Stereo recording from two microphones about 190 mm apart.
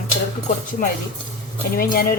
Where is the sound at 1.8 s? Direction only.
50° left (ahead or behind).